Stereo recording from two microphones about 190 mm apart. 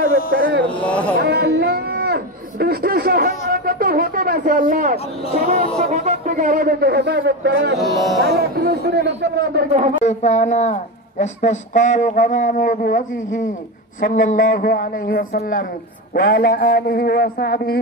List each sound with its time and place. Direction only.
0.3 s a man's voice: 65° right (ahead or behind)
0.7 s speech: 5° left (ahead or behind)
1.1 s a sound: 60° right (ahead or behind); by 4.9 s 45° right (ahead or behind)
5.8 s speech: 35° right (ahead or behind); by 7.8 s 65° right (ahead or behind)
7.8 s speech: centre (ahead or behind)
8.2 s a man's voice: 60° right (ahead or behind)
10.0 s a woman's voice: 35° left (ahead or behind); by 17.7 s 55° left (ahead or behind)